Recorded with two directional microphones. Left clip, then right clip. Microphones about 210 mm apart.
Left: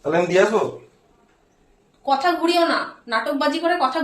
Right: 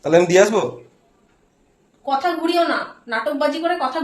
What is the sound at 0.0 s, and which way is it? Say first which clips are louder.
Speech: right 4 dB; 55° right (ahead or behind).